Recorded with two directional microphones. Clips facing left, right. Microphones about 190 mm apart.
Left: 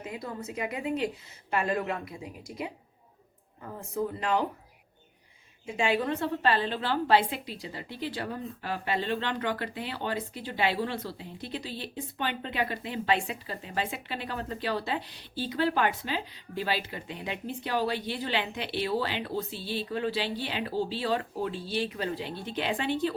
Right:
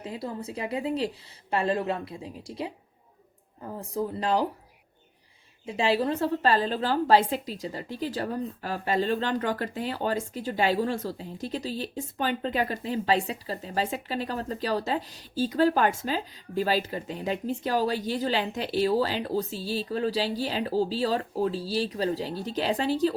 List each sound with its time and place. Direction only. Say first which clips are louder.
0.0 s a woman's voice: right 3 dB; 30° right (ahead or behind)
5.6 s a woman's voice: right 3 dB; 35° right (ahead or behind)